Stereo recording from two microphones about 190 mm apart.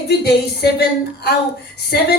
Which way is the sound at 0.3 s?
60° left (ahead or behind).